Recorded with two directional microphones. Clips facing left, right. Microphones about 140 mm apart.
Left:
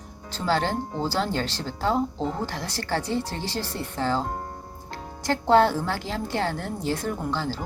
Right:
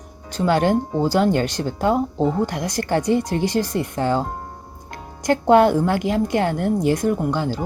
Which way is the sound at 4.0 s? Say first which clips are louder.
Right 4 dB; 50° right (ahead or behind).